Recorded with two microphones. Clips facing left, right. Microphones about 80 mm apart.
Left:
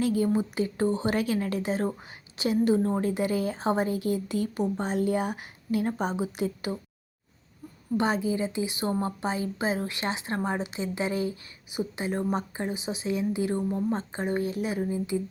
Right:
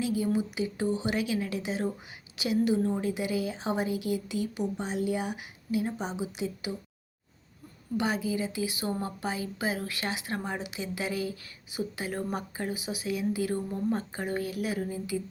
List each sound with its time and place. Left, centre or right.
0.0 s a woman's voice: left
7.9 s a woman's voice: left